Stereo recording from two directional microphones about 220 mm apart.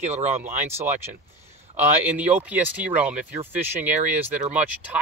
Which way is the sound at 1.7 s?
5° right (ahead or behind).